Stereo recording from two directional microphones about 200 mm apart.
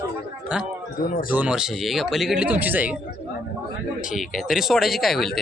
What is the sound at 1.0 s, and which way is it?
Speech, 45° left (ahead or behind).